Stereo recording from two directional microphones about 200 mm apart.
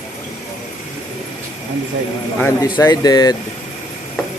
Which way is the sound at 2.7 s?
15° left (ahead or behind).